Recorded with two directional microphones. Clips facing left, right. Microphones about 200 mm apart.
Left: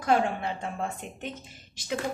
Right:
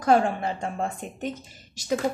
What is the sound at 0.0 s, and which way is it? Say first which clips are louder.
Speech: right 4 dB; 45° right (ahead or behind).